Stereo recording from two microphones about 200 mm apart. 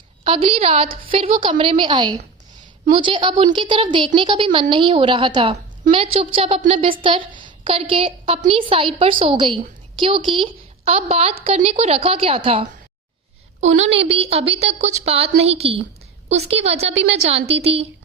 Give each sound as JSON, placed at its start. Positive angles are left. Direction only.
{"t": 0.3, "sound": "a woman's voice", "side_deg": -25}